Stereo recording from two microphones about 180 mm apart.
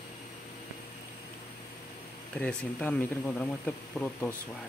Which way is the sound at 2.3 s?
5° left (ahead or behind).